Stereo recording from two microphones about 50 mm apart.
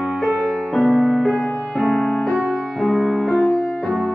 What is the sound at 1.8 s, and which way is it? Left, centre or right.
Music, centre.